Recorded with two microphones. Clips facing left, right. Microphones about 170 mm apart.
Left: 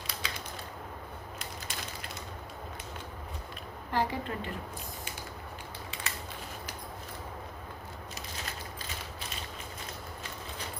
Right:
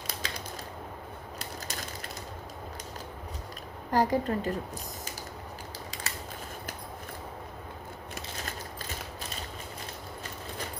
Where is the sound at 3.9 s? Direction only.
40° right (ahead or behind).